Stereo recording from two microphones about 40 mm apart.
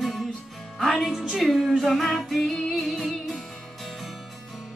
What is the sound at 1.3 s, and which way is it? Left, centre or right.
Music, centre.